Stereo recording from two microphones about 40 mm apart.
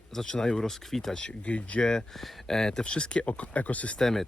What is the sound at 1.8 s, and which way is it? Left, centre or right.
Speech, centre.